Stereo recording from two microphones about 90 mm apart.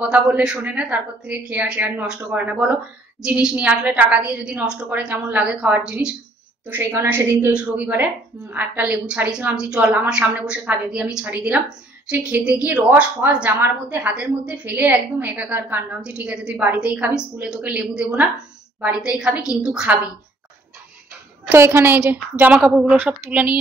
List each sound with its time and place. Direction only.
0.0 s a woman's voice: 15° right (ahead or behind)
6.7 s a woman's voice: 25° right (ahead or behind); by 20.0 s 10° right (ahead or behind)
21.5 s a woman's voice: 25° right (ahead or behind)
22.6 s a woman's voice: 5° right (ahead or behind)
22.9 s a woman's voice: 20° right (ahead or behind)